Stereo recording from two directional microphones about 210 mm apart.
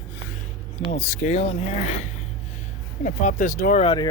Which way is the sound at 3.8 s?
20° left (ahead or behind).